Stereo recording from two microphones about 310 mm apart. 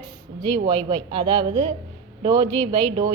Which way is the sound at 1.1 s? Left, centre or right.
Centre.